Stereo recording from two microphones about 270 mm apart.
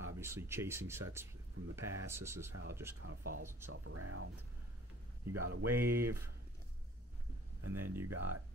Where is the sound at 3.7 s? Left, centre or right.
Right.